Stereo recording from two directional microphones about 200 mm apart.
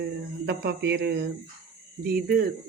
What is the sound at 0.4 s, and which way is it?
Speech, 55° right (ahead or behind).